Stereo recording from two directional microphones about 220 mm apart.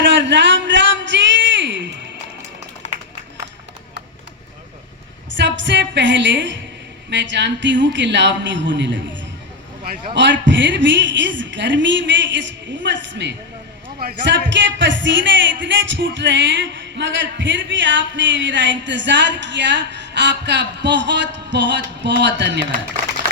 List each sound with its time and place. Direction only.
0.0 s a sound: 55° right (ahead or behind)
2.8 s a sound: 30° left (ahead or behind)
5.4 s a woman's voice: 55° right (ahead or behind)
9.8 s a man's voice: 40° right (ahead or behind)
10.2 s a woman's voice: 55° right (ahead or behind)
15.6 s music: 55° right (ahead or behind)